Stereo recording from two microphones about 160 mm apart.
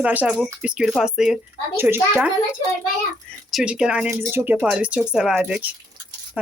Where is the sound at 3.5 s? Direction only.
5° right (ahead or behind).